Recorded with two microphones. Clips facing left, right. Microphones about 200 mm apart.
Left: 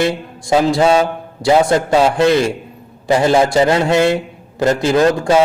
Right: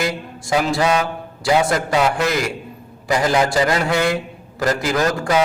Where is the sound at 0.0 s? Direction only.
25° left (ahead or behind).